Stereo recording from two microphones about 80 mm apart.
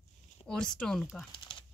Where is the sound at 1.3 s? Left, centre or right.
Left.